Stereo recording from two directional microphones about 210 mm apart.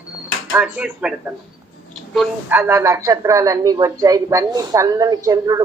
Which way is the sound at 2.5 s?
10° right (ahead or behind).